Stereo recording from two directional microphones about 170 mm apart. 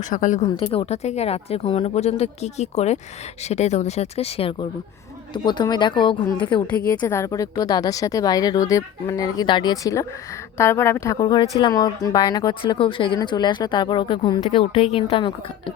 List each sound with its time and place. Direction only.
0.1 s a woman's voice: 50° left (ahead or behind)
0.5 s speech: 35° left (ahead or behind)
6.7 s speech: 10° left (ahead or behind); by 15.7 s 30° left (ahead or behind)